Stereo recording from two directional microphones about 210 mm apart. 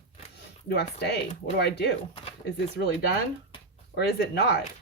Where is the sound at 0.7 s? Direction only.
50° left (ahead or behind).